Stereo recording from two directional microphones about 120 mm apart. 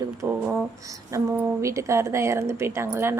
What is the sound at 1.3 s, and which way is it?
A woman's voice, 20° right (ahead or behind).